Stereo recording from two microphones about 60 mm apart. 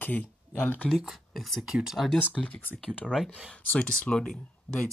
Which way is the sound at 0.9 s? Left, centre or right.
Centre.